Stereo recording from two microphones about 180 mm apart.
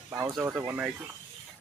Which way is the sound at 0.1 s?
15° right (ahead or behind).